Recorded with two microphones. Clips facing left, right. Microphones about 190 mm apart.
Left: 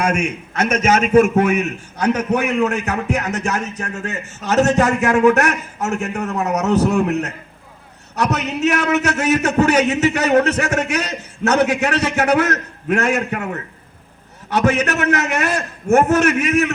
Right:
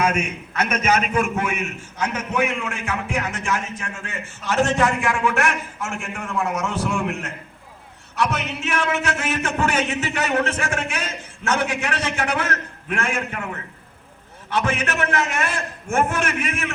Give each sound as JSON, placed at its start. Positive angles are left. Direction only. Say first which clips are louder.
{"t": 0.0, "sound": "a man's voice", "louder": "left 3 dB", "side_deg": 50}